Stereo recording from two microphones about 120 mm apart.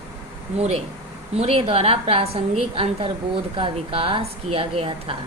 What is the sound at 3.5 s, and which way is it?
A woman's voice, 50° right (ahead or behind).